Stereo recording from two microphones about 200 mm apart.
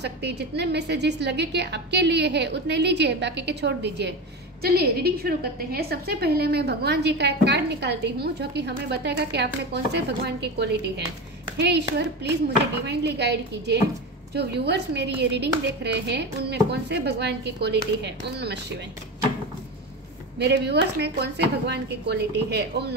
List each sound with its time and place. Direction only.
0.0 s a woman's voice: 55° right (ahead or behind)
20.3 s a woman's voice: 55° right (ahead or behind)